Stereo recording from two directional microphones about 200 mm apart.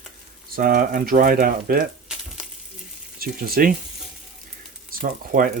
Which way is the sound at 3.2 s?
50° right (ahead or behind).